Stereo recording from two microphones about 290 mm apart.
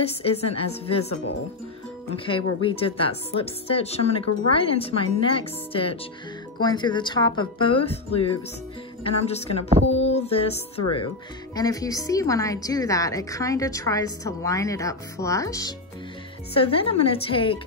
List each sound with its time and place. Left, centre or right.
0.0 s speech: left
2.1 s a woman's voice: centre
9.9 s a sound: left
11.5 s a woman's voice: centre